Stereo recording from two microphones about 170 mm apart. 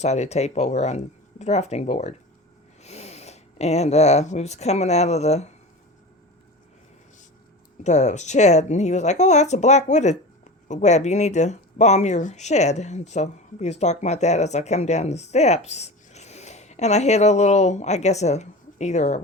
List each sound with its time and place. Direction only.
0.0 s speech: 40° left (ahead or behind)
7.9 s a woman's voice: 45° left (ahead or behind)